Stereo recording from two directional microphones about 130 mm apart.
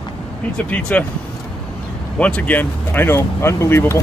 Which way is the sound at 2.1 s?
10° left (ahead or behind).